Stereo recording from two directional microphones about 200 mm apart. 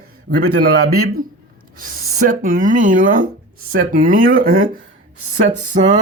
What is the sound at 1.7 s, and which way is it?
Speech, 45° right (ahead or behind).